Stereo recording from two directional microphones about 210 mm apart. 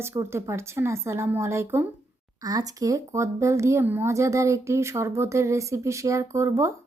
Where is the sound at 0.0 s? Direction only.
15° right (ahead or behind).